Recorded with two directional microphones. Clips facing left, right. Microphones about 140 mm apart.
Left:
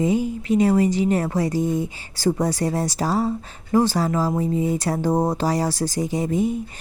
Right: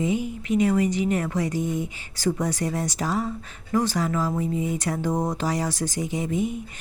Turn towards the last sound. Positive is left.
turn(degrees=35)  # may be behind; listen again after turning